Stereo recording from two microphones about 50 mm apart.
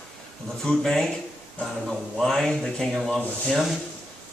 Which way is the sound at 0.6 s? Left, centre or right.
Centre.